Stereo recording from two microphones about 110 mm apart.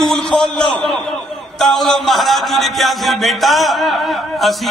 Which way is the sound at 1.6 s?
Centre (ahead or behind).